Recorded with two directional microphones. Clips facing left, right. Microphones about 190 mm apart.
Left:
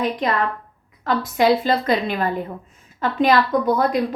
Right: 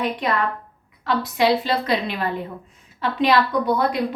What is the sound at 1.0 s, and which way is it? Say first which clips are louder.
A woman's voice: left 2 dB; 45° left (ahead or behind).